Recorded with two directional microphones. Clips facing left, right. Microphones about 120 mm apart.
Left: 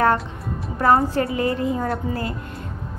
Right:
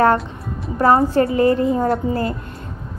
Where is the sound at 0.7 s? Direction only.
30° right (ahead or behind).